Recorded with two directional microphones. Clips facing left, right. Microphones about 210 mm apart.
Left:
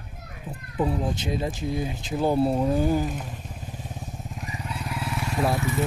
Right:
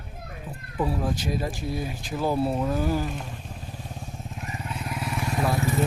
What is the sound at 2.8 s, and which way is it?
Speech, 15° left (ahead or behind).